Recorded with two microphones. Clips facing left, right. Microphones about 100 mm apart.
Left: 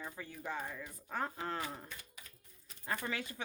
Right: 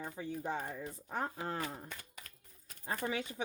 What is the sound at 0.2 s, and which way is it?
Speech, 25° right (ahead or behind).